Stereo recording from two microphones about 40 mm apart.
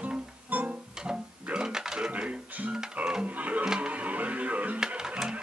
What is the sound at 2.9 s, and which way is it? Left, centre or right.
Music, right.